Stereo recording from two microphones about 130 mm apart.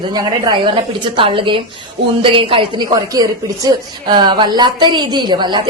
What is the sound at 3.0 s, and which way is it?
A woman's voice, 25° right (ahead or behind).